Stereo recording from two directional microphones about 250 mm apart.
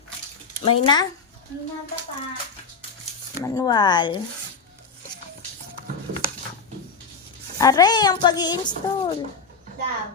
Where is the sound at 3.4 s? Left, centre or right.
Centre.